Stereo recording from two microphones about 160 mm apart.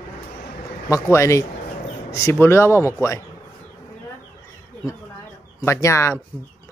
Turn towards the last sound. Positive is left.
turn(degrees=15)  # may be behind; listen again after turning